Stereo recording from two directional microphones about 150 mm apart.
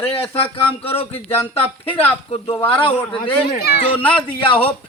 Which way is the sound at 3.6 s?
90° left.